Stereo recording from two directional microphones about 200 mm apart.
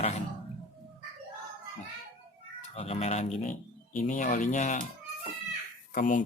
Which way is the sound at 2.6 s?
30° left (ahead or behind).